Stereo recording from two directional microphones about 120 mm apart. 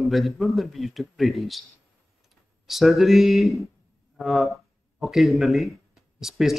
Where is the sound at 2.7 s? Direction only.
Centre (ahead or behind).